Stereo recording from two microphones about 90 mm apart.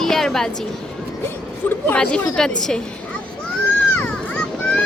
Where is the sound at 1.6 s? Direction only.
20° left (ahead or behind).